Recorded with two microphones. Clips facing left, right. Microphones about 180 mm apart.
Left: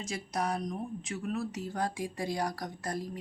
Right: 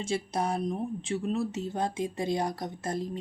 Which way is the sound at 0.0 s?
30° right (ahead or behind).